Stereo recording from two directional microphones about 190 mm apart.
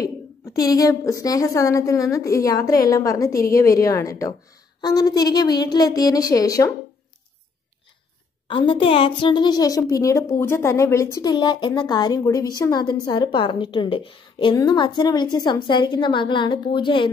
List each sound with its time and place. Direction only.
0.0 s a woman's voice: 20° left (ahead or behind)
8.5 s a woman's voice: 25° left (ahead or behind)